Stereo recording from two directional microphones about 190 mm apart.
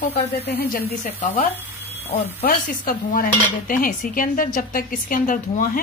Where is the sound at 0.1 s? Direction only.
60° left (ahead or behind).